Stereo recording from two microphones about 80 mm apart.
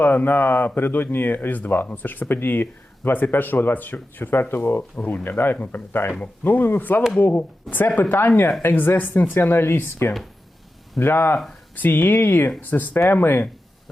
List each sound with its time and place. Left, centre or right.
0.0 s speech: left